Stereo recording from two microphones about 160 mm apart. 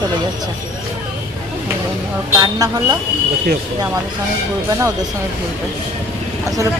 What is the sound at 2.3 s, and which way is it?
Speech, 20° right (ahead or behind).